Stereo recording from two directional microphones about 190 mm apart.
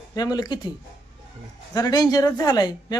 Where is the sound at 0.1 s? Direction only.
20° left (ahead or behind).